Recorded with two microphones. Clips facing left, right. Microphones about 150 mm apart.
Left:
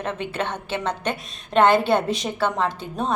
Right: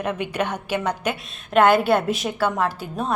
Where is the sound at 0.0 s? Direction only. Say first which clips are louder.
Right 2 dB; 15° right (ahead or behind).